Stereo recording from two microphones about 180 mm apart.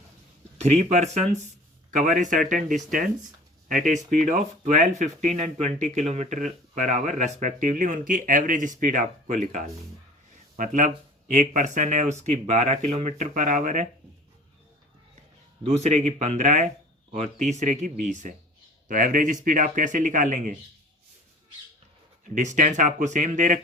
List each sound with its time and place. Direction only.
0.6 s speech: 40° right (ahead or behind)
10.8 s speech: 45° right (ahead or behind)
15.6 s speech: 40° right (ahead or behind)
22.4 s speech: 45° right (ahead or behind)